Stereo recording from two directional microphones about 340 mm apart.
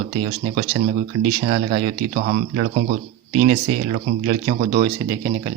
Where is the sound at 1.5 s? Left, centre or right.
Right.